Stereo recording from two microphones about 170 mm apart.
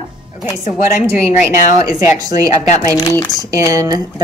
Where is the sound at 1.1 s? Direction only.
15° right (ahead or behind).